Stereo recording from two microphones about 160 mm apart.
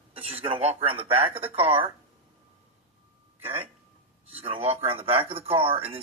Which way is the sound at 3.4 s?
40° right (ahead or behind).